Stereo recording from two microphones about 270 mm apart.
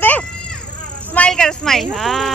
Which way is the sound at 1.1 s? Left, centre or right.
Centre.